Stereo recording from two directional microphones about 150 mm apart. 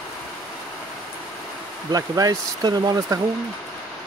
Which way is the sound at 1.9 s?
25° right (ahead or behind).